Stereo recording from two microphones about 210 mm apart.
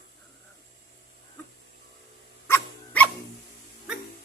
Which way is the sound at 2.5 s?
10° left (ahead or behind).